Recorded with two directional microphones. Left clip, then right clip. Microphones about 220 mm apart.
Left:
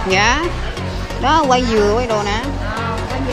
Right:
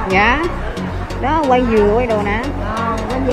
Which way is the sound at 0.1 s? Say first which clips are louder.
Right 1 dB; 30° left (ahead or behind).